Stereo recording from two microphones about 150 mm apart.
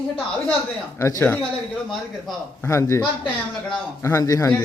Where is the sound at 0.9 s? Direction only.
20° left (ahead or behind).